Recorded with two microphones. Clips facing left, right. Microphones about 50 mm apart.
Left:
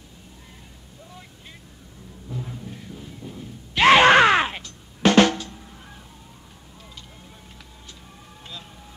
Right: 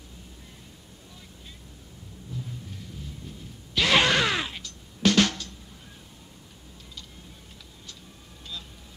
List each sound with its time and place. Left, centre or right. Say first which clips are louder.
2.3 s music: left 5 dB; left
2.7 s groan: left 3 dB; left
4.6 s drum: left 4 dB; left